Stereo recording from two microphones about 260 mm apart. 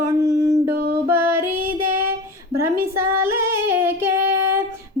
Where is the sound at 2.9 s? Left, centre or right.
Centre.